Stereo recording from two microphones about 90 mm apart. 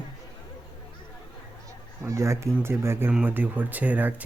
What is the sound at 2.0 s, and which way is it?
Speech, 35° right (ahead or behind).